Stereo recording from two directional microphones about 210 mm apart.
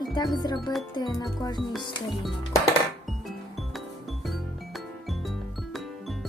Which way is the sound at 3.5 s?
Centre (ahead or behind).